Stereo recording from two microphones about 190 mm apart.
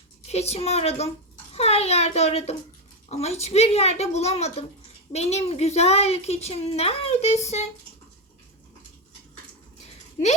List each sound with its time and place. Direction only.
0.3 s a child's voice: 35° left (ahead or behind)